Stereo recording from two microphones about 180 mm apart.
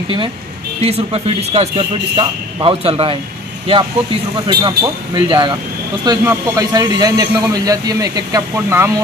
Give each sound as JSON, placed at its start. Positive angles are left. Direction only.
{"t": 0.8, "sound": "a man's voice", "side_deg": -35}